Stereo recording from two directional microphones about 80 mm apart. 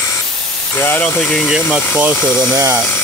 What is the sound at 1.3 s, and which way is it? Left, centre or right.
Speech, centre.